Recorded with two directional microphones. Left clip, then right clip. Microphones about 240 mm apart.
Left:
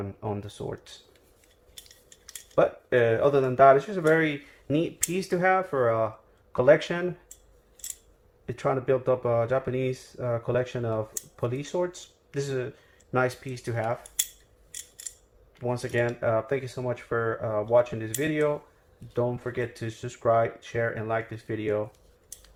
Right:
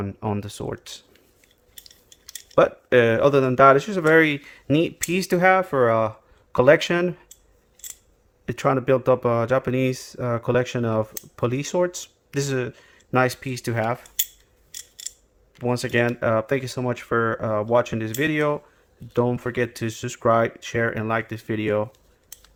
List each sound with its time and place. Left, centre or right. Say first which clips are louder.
0.0 s speech: right 5 dB; right
2.6 s speech: right 6 dB; right
8.4 s speech: right 5 dB; right
15.6 s speech: right 5 dB; right